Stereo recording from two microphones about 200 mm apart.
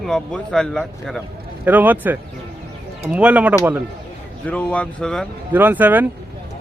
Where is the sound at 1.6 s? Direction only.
10° right (ahead or behind).